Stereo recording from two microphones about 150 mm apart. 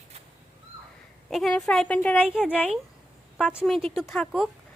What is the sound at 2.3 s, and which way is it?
Speech, 5° right (ahead or behind).